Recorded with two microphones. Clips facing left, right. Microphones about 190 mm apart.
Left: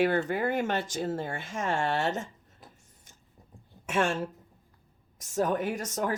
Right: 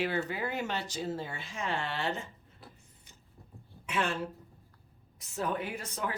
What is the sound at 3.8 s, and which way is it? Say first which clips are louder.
A woman's voice: left 5 dB; 45° left (ahead or behind).